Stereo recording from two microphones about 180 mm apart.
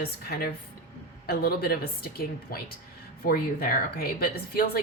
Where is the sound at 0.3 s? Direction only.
55° left (ahead or behind).